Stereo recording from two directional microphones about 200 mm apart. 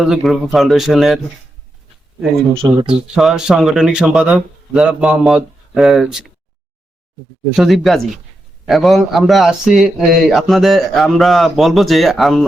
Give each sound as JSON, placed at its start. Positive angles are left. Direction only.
{"t": 0.0, "sound": "a man's voice", "side_deg": 0}
{"t": 2.5, "sound": "speech", "side_deg": -25}
{"t": 2.8, "sound": "a man's voice", "side_deg": 0}
{"t": 7.5, "sound": "a man's voice", "side_deg": 0}